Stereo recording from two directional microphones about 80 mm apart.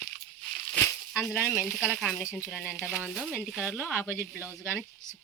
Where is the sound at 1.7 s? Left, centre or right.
Centre.